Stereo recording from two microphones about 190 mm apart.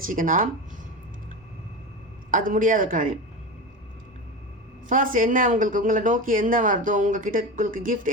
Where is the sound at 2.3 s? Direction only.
45° right (ahead or behind).